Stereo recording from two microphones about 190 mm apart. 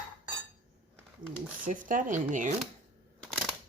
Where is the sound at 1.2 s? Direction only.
45° right (ahead or behind).